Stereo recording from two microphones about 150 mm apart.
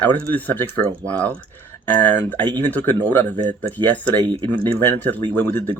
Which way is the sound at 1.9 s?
10° left (ahead or behind).